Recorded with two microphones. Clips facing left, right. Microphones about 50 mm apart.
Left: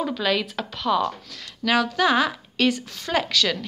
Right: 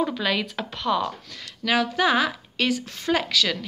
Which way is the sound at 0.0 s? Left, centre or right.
Centre.